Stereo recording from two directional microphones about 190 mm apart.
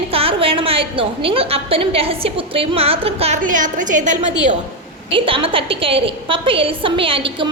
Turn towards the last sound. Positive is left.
turn(degrees=-30)  # may be behind; listen again after turning